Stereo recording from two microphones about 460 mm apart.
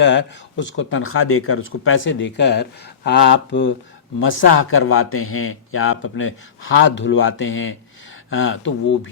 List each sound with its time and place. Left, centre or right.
0.0 s speech: left